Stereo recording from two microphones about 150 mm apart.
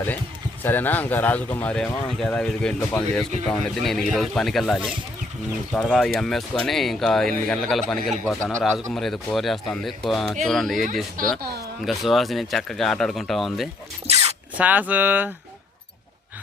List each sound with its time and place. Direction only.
0.6 s speech: 10° left (ahead or behind)
11.3 s speech: 90° right
11.9 s speech: centre (ahead or behind)
14.1 s a sound: 45° right (ahead or behind)
14.6 s speech: 10° right (ahead or behind)